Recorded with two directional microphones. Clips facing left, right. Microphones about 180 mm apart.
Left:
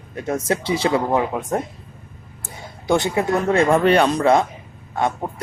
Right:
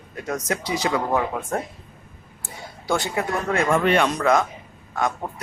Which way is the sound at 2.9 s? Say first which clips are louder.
Left 5 dB; 20° left (ahead or behind).